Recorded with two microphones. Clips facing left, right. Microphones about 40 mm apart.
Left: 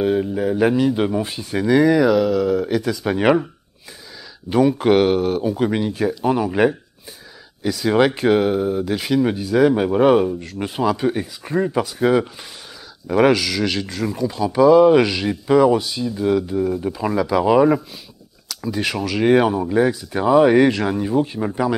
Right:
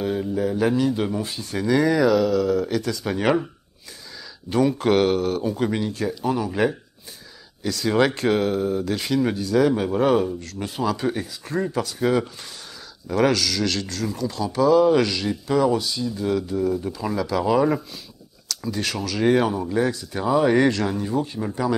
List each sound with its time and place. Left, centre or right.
0.0 s speech: left
4.5 s speech: centre